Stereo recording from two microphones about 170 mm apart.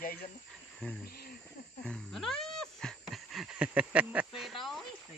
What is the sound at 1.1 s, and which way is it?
Snake, 65° left (ahead or behind).